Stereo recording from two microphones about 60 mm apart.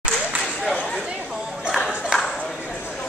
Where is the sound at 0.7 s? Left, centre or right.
Centre.